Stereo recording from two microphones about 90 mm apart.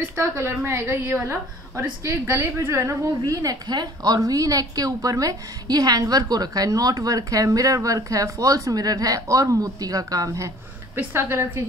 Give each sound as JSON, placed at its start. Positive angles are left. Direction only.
{"t": 0.1, "sound": "a woman's voice", "side_deg": -30}
{"t": 3.3, "sound": "a woman's voice", "side_deg": -45}
{"t": 11.0, "sound": "a woman's voice", "side_deg": -25}